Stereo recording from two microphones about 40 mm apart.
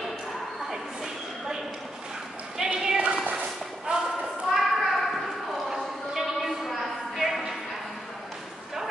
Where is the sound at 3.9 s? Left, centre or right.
Right.